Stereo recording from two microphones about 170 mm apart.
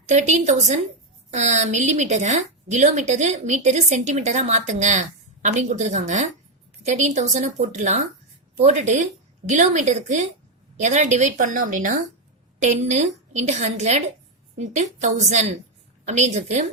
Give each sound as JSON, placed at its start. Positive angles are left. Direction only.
{"t": 0.1, "sound": "a woman's voice", "side_deg": -45}